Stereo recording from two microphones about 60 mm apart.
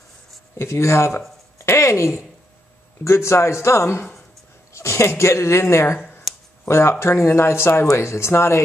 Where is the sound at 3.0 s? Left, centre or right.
Left.